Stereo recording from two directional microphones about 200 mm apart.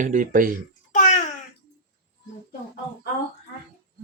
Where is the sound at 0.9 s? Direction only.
35° left (ahead or behind).